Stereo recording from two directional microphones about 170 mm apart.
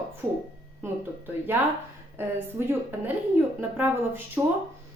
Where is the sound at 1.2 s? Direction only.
10° right (ahead or behind).